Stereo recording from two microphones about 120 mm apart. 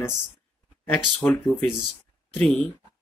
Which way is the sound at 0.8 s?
10° left (ahead or behind).